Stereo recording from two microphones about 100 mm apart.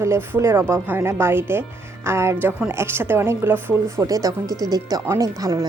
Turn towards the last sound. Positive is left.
turn(degrees=-35)  # may be behind; listen again after turning